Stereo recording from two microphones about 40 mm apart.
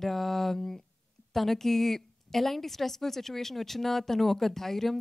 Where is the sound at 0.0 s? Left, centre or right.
Centre.